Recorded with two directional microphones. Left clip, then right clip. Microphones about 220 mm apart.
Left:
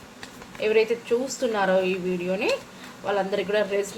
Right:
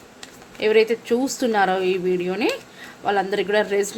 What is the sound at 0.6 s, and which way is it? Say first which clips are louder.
Speech: right 4 dB; 50° right (ahead or behind).